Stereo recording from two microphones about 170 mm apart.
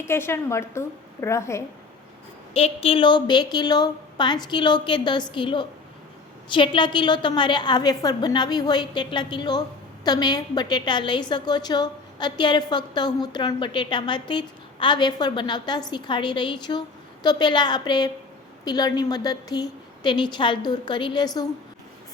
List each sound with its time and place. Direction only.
0.0 s a woman's voice: 15° left (ahead or behind)
2.5 s a woman's voice: 35° left (ahead or behind)